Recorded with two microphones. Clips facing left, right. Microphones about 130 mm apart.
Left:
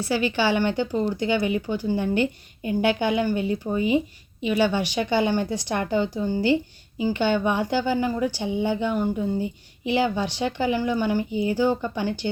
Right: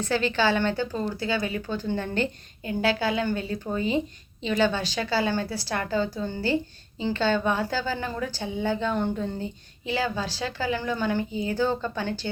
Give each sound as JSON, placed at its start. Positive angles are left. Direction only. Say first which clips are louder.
{"t": 0.0, "sound": "speech", "louder": "left 1 dB", "side_deg": 10}